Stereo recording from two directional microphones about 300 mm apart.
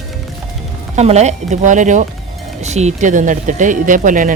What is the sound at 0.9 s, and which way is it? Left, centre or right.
Speech, right.